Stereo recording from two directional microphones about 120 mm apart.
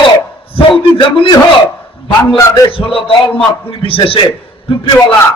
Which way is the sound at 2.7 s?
50° left (ahead or behind).